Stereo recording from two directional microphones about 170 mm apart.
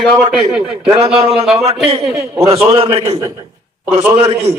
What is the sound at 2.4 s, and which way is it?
Speech, 35° right (ahead or behind).